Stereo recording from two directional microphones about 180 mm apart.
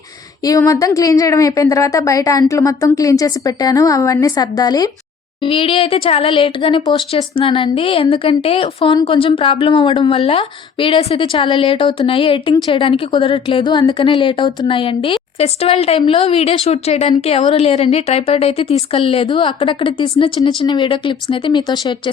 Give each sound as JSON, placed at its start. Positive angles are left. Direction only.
{"t": 0.4, "sound": "speech", "side_deg": 20}